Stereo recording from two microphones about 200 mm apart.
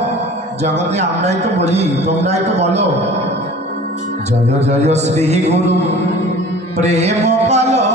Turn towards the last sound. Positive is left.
turn(degrees=-35)  # may be behind; listen again after turning